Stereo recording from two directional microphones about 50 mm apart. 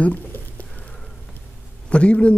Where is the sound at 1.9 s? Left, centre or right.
Left.